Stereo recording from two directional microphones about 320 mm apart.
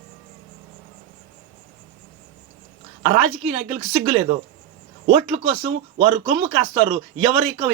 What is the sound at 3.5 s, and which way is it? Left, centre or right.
Speech, centre.